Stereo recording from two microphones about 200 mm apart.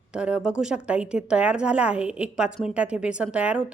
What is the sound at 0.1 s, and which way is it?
A woman's voice, 5° right (ahead or behind).